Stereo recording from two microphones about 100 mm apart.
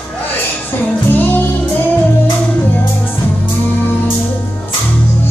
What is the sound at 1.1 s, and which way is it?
Music, 20° left (ahead or behind).